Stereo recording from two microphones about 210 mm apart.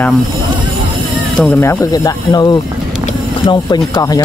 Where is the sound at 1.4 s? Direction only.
10° left (ahead or behind).